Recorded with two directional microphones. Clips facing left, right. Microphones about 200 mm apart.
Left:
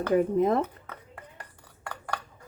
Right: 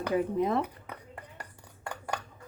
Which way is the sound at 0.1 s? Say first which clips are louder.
Left 5 dB; 50° left (ahead or behind).